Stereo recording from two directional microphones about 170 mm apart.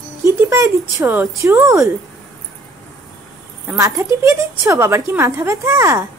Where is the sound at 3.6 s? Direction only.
20° right (ahead or behind).